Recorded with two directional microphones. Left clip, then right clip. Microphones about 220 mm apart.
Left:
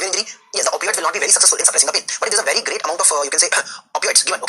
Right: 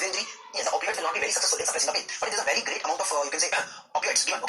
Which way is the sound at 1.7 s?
50° left (ahead or behind).